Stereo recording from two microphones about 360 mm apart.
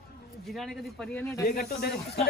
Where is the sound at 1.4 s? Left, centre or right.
Left.